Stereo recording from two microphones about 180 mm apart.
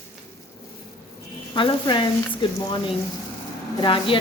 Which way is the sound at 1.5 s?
25° left (ahead or behind).